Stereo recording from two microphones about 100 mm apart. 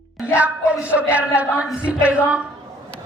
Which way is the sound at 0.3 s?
15° right (ahead or behind).